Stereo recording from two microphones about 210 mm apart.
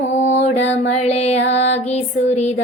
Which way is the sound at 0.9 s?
30° left (ahead or behind).